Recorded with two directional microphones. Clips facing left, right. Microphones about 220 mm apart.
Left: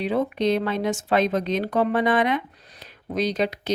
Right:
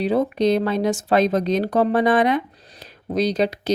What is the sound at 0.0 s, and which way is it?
Speech, 40° right (ahead or behind).